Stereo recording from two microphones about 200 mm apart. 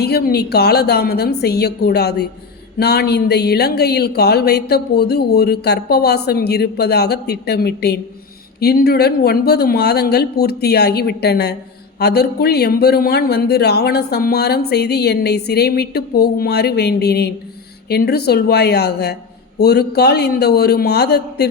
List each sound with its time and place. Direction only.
0.0 s speech: 50° left (ahead or behind)